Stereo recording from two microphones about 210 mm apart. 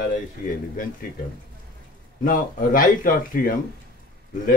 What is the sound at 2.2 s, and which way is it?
A man's voice, 40° left (ahead or behind).